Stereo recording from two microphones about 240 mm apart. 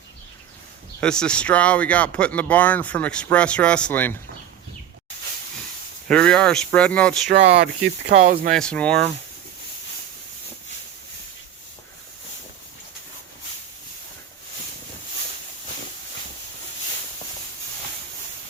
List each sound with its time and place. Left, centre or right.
1.0 s speech: centre
6.1 s speech: centre
7.3 s speech: right
8.5 s speech: centre